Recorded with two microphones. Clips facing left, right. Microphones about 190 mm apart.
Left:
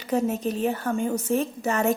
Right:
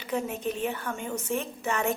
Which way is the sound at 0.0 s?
40° left (ahead or behind).